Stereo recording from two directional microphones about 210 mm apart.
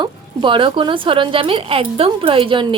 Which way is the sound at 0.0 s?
25° right (ahead or behind).